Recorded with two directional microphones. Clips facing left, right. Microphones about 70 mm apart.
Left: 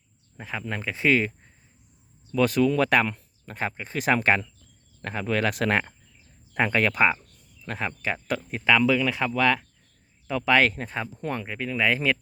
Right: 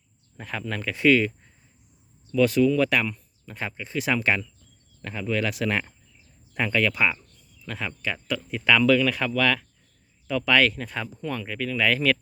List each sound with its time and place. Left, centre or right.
0.3 s speech: centre
0.6 s speech: left
2.3 s speech: left
8.6 s speech: centre